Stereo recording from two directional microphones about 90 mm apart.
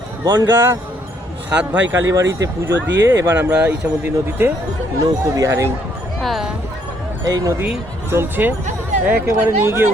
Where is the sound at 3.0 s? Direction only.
40° right (ahead or behind).